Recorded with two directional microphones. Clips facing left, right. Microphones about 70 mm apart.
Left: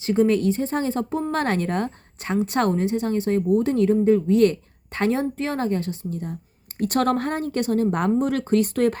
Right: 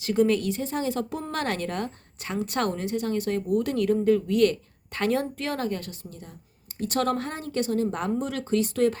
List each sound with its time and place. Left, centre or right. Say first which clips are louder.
0.0 s a woman's voice: left 3 dB; left